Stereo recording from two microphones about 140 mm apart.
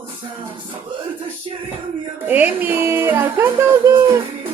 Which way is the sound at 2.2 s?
10° right (ahead or behind).